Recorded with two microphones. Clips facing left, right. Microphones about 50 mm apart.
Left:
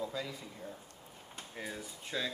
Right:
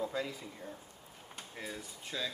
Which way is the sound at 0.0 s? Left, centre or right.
Right.